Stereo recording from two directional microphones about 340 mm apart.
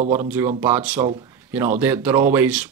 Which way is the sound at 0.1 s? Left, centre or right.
Centre.